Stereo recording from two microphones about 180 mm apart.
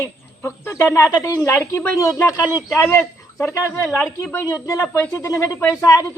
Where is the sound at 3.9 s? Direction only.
Centre (ahead or behind).